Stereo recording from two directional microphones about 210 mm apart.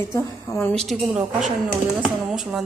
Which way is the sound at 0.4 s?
10° left (ahead or behind).